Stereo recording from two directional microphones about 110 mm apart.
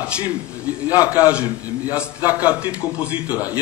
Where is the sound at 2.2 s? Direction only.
35° left (ahead or behind).